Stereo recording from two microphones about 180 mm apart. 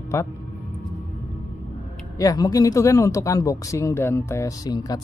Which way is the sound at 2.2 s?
20° left (ahead or behind).